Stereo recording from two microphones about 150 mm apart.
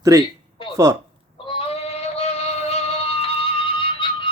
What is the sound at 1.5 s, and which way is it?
Synthetic singing, 40° left (ahead or behind).